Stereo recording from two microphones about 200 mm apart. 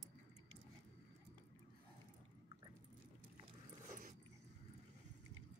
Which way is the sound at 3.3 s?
40° right (ahead or behind).